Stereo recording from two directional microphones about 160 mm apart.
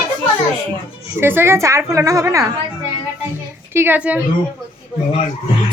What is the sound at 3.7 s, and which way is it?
Speech, 15° right (ahead or behind).